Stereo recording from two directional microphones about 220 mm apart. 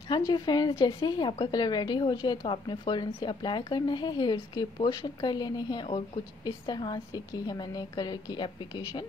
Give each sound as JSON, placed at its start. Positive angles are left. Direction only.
{"t": 0.3, "sound": "a woman's voice", "side_deg": 20}